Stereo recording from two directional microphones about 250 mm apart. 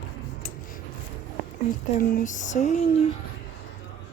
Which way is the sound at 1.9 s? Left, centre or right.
Left.